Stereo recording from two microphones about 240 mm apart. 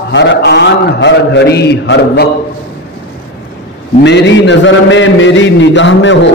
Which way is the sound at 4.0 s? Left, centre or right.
Left.